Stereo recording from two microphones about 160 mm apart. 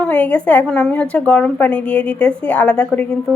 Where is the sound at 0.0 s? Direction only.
10° left (ahead or behind).